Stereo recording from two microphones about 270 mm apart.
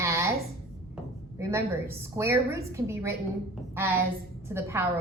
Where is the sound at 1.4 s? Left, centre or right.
Centre.